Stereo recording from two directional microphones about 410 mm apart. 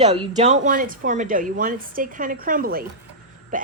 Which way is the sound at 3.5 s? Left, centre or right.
Centre.